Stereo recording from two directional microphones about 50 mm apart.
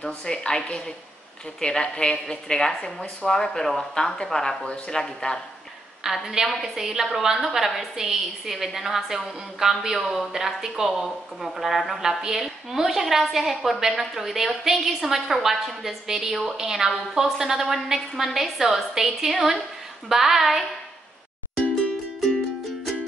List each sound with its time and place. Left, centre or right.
0.0 s speech: centre
6.0 s a woman's voice: centre
6.8 s a woman's voice: centre